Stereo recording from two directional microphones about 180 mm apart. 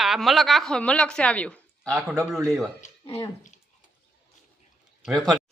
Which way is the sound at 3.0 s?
20° left (ahead or behind).